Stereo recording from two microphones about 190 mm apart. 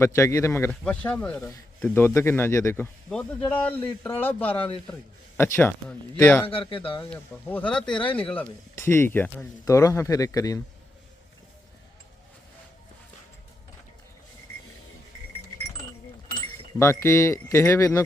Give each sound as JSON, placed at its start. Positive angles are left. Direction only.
{"t": 0.0, "sound": "speech", "side_deg": 15}
{"t": 6.5, "sound": "speech", "side_deg": 30}
{"t": 7.0, "sound": "speech", "side_deg": 10}
{"t": 16.7, "sound": "speech", "side_deg": 15}